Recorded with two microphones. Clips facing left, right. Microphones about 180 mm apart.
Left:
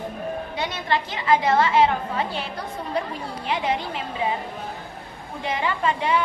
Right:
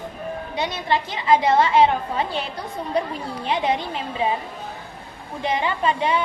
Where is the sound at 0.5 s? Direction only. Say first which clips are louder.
Right 3 dB; 20° right (ahead or behind).